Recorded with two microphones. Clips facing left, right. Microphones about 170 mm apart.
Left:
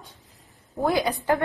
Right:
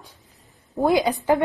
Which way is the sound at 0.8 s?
20° right (ahead or behind).